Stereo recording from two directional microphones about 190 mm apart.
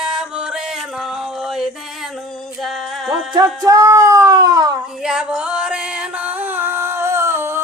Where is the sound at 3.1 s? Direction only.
20° right (ahead or behind).